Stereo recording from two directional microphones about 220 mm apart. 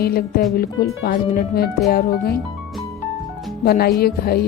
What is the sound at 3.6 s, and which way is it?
Speech, 45° left (ahead or behind).